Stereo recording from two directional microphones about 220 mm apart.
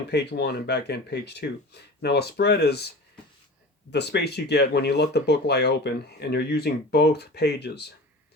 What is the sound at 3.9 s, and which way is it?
Speech, 50° left (ahead or behind).